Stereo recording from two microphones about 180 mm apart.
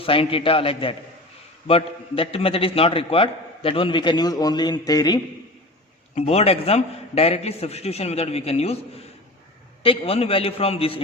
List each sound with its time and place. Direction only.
0.0 s a man's voice: 30° left (ahead or behind)
6.1 s a man's voice: 35° left (ahead or behind)
9.8 s a man's voice: 30° left (ahead or behind)